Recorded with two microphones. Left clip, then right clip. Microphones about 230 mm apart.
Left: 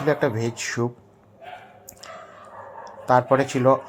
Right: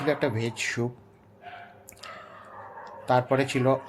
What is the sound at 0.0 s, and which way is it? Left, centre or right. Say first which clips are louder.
Speech: left 4 dB; centre.